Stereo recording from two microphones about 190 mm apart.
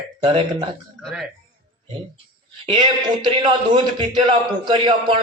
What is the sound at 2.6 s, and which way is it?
A man's voice, 25° right (ahead or behind).